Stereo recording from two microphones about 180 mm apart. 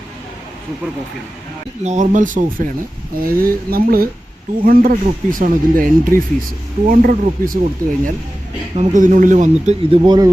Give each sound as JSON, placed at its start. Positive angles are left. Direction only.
{"t": 1.8, "sound": "speech", "side_deg": -40}
{"t": 10.0, "sound": "speech", "side_deg": -20}